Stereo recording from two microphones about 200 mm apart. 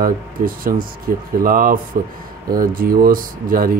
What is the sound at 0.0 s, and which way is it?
Speech, 45° right (ahead or behind).